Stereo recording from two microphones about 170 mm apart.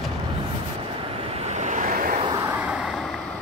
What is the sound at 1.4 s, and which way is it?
Vehicle, 40° right (ahead or behind).